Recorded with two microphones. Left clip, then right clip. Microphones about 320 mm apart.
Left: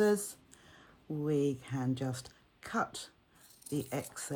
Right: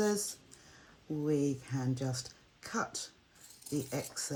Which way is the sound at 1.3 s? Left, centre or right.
Left.